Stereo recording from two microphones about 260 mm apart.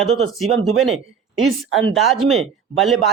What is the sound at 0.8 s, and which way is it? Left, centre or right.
Speech, centre.